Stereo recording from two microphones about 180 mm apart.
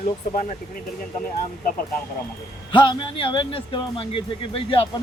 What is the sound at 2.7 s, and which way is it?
Speech, 25° left (ahead or behind).